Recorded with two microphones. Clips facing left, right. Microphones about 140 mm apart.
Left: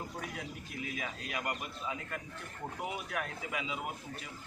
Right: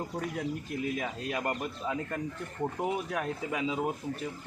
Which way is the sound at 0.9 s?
45° right (ahead or behind).